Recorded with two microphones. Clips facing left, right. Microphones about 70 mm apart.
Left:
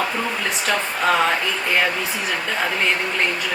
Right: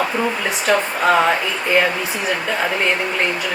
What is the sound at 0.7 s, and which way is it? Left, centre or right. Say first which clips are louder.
Speech: right 7 dB; centre.